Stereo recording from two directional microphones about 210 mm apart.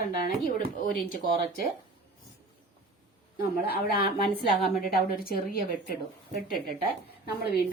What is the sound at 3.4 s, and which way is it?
A woman's voice, 45° left (ahead or behind).